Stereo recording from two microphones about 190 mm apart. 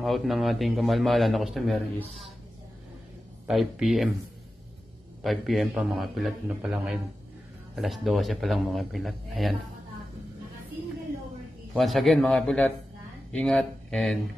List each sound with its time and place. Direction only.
0.0 s a man's voice: centre (ahead or behind)
3.4 s a man's voice: centre (ahead or behind)
5.2 s a man's voice: centre (ahead or behind)
11.7 s a man's voice: centre (ahead or behind)